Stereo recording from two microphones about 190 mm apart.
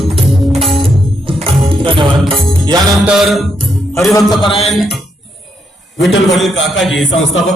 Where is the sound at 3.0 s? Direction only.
Centre (ahead or behind).